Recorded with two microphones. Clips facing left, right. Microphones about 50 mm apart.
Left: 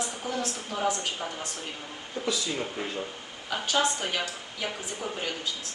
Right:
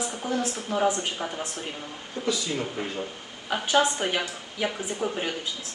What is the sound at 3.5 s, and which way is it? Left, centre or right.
Speech, centre.